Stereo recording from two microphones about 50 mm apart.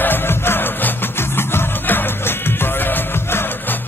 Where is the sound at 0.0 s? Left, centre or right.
Left.